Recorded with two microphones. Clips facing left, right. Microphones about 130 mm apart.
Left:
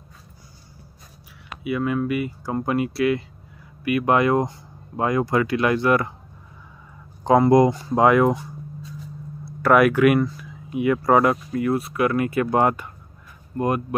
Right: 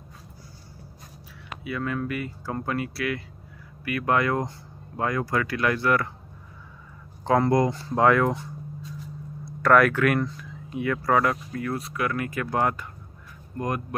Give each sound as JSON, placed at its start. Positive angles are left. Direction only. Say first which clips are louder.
{"t": 1.6, "sound": "speech", "louder": "left 6 dB", "side_deg": 10}
{"t": 7.2, "sound": "speech", "louder": "left 6 dB", "side_deg": 15}